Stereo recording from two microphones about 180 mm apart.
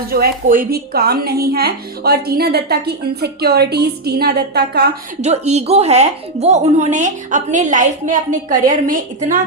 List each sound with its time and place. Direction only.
0.1 s a woman's voice: 55° right (ahead or behind)
5.2 s a woman's voice: 35° right (ahead or behind)